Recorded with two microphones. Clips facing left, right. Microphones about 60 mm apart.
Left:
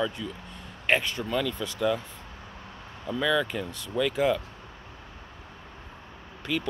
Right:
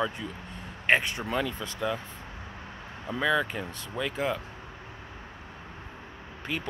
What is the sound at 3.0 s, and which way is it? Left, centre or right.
Speech, right.